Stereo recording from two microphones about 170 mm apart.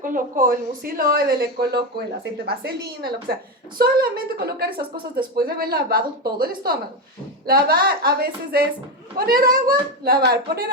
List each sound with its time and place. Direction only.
0.0 s a woman's voice: 55° right (ahead or behind)